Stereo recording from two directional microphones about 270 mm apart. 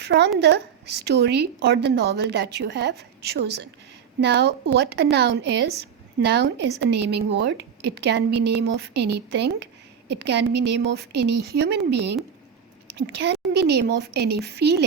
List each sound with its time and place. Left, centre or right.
0.0 s a woman's voice: right